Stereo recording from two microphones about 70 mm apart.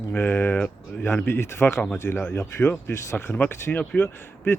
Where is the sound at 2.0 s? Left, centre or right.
Centre.